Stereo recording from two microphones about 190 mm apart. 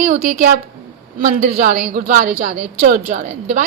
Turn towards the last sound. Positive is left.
turn(degrees=-45)  # may be behind; listen again after turning